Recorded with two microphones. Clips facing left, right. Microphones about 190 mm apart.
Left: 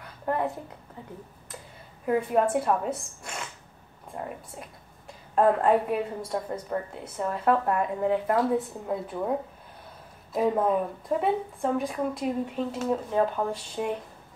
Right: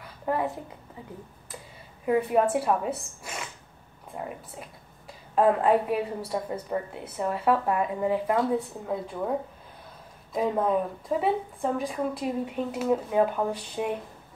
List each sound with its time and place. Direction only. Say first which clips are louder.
0.3 s a woman's voice: even; 5° right (ahead or behind)
2.0 s a woman's voice: right 1 dB; 5° right (ahead or behind)
4.1 s a woman's voice: even; centre (ahead or behind)
10.3 s a woman's voice: left 1 dB; centre (ahead or behind)